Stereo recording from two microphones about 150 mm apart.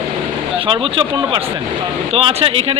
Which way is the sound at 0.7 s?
35° right (ahead or behind).